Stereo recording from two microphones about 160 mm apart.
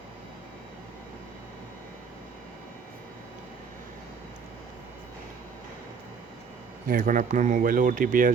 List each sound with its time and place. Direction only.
6.8 s speech: 60° right (ahead or behind)